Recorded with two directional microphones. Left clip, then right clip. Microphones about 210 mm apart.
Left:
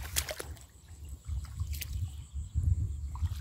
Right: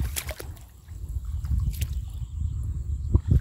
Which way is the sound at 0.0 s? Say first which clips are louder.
Right 1 dB; centre (ahead or behind).